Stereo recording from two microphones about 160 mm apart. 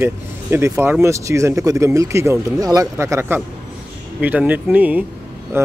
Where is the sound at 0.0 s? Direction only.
15° right (ahead or behind).